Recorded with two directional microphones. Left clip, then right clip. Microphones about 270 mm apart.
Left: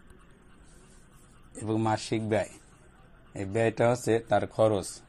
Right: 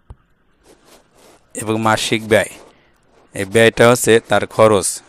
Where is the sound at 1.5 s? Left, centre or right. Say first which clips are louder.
Right 13 dB; right.